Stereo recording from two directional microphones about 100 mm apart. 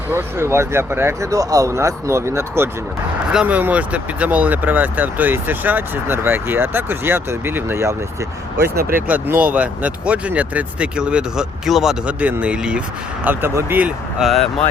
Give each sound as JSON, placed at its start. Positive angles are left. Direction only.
{"t": 0.1, "sound": "speech", "side_deg": -25}
{"t": 3.3, "sound": "speech", "side_deg": -15}
{"t": 13.2, "sound": "speech", "side_deg": -20}
{"t": 14.2, "sound": "speech", "side_deg": 0}